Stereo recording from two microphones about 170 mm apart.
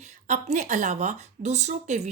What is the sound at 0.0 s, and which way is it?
Speech, 45° right (ahead or behind).